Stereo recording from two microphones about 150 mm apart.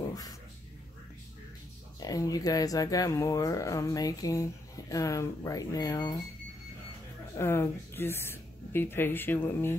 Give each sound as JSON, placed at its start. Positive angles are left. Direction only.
{"t": 0.1, "sound": "a sound", "side_deg": 25}
{"t": 2.0, "sound": "speech", "side_deg": 25}
{"t": 7.3, "sound": "speech", "side_deg": 15}